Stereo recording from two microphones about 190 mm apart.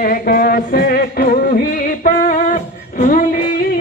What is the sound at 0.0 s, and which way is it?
Music, 50° left (ahead or behind).